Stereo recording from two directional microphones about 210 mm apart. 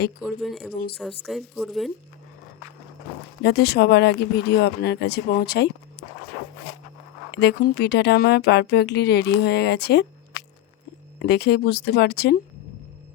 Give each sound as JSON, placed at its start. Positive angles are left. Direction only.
{"t": 0.2, "sound": "speech", "side_deg": 0}
{"t": 3.4, "sound": "speech", "side_deg": 50}
{"t": 7.3, "sound": "speech", "side_deg": 55}
{"t": 11.2, "sound": "speech", "side_deg": 50}